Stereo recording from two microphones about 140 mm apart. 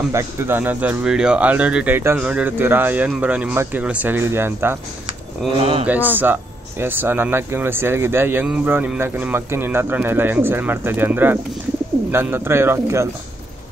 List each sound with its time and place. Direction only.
0.1 s speech: 15° right (ahead or behind)
5.6 s speech: 45° right (ahead or behind)
6.1 s speech: 15° right (ahead or behind)